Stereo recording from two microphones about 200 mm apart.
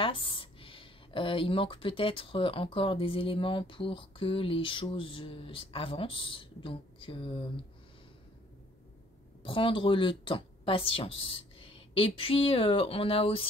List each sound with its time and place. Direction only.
0.0 s speech: 25° left (ahead or behind)
9.4 s a woman's voice: 25° left (ahead or behind)